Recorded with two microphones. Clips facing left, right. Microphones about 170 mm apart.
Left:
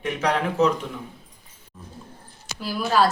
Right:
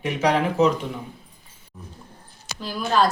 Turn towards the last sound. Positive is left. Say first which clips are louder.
# even
turn(degrees=5)  # may be behind; listen again after turning